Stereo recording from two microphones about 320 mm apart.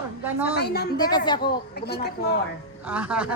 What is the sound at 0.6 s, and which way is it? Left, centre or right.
Speech, left.